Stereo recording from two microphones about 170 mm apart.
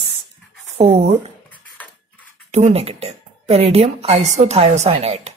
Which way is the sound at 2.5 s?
40° right (ahead or behind).